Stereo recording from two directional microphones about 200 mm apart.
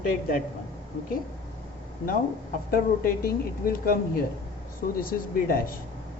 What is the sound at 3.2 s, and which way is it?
Speech, 45° left (ahead or behind).